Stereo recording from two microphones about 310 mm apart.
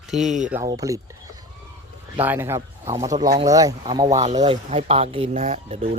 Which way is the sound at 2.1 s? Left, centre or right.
Centre.